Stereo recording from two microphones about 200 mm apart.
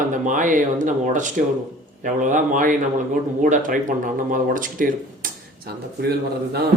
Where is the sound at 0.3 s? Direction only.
40° right (ahead or behind).